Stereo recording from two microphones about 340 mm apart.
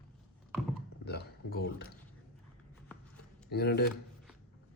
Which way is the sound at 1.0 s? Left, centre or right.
Left.